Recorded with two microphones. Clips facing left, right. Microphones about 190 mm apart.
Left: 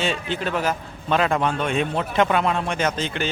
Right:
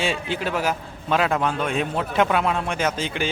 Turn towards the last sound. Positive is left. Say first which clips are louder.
# even
turn(degrees=-10)  # may be behind; listen again after turning